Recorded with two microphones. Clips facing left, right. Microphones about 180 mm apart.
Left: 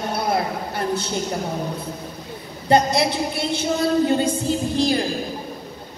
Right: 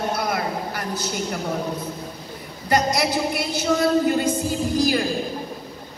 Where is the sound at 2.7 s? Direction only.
25° left (ahead or behind).